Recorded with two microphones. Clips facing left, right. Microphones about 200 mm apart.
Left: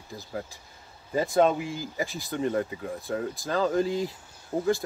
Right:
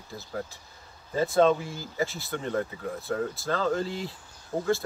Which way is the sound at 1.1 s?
15° left (ahead or behind).